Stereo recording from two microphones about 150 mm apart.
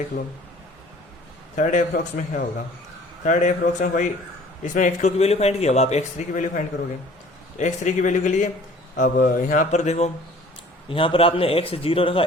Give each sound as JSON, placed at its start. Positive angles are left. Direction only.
{"t": 1.5, "sound": "a man's voice", "side_deg": 60}
{"t": 10.8, "sound": "a man's voice", "side_deg": 35}